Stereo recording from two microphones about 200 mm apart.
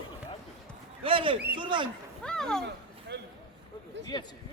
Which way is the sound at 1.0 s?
25° right (ahead or behind).